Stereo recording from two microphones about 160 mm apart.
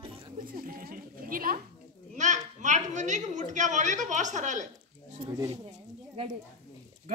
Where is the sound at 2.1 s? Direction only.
50° right (ahead or behind).